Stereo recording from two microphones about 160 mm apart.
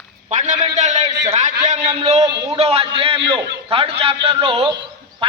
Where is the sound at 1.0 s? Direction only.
25° right (ahead or behind).